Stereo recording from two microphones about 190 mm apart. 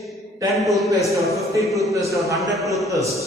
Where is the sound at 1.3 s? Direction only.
15° right (ahead or behind).